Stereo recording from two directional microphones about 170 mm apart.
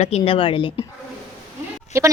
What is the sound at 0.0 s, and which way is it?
Speech, 35° left (ahead or behind).